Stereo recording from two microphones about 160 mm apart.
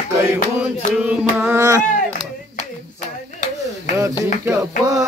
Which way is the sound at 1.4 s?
15° right (ahead or behind).